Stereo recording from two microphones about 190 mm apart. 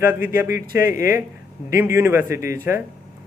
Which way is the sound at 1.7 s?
15° right (ahead or behind).